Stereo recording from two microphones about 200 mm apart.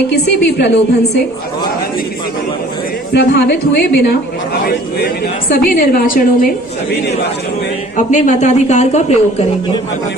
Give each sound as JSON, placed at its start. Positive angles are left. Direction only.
{"t": 0.1, "sound": "a woman's voice", "side_deg": 60}
{"t": 3.2, "sound": "a woman's voice", "side_deg": 55}
{"t": 4.6, "sound": "a woman's voice", "side_deg": 50}
{"t": 7.9, "sound": "speech", "side_deg": 40}